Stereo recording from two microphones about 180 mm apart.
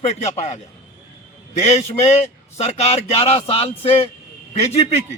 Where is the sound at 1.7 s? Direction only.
35° left (ahead or behind).